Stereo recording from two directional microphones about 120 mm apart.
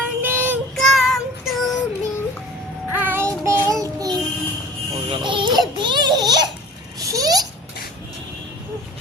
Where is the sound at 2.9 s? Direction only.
15° right (ahead or behind).